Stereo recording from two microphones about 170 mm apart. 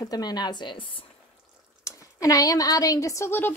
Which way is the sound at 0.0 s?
25° left (ahead or behind).